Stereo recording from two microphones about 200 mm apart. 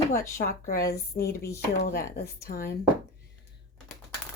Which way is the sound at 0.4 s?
45° left (ahead or behind).